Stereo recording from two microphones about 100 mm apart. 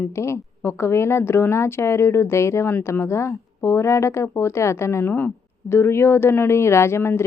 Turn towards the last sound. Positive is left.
turn(degrees=25)  # may be behind; listen again after turning